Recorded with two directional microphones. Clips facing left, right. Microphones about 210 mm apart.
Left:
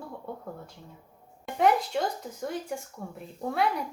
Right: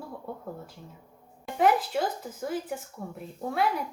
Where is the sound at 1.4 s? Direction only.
Centre (ahead or behind).